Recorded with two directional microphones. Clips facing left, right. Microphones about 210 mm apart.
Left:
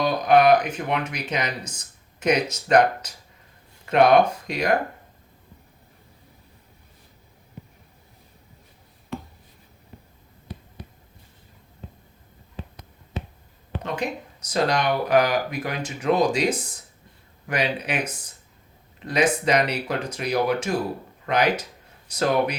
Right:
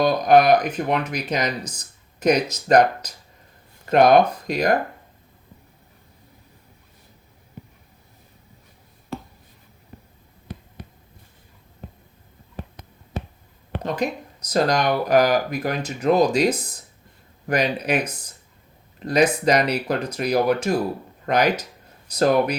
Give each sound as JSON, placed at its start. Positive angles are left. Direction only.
{"t": 0.0, "sound": "speech", "side_deg": -40}
{"t": 12.5, "sound": "a sound", "side_deg": -55}
{"t": 14.4, "sound": "speech", "side_deg": -40}